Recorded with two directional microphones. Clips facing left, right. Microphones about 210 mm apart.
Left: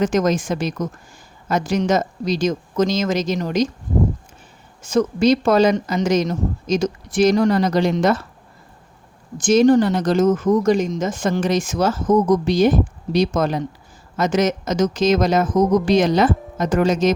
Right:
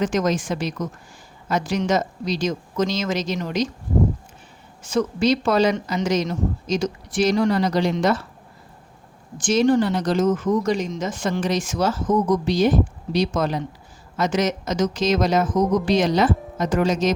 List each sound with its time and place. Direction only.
0.0 s speech: 45° left (ahead or behind)
4.9 s speech: 45° left (ahead or behind)
9.4 s speech: 45° left (ahead or behind)